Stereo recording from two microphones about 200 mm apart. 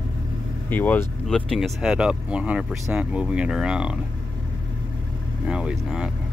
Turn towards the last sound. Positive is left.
turn(degrees=-5)  # may be behind; listen again after turning